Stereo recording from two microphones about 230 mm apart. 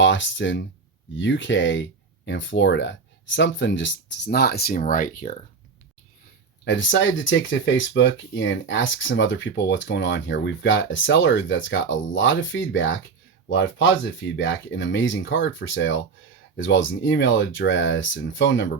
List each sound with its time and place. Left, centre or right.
0.0 s speech: left
6.7 s speech: left